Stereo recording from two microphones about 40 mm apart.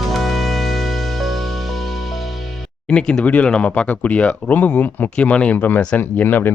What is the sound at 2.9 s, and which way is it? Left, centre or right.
Speech, left.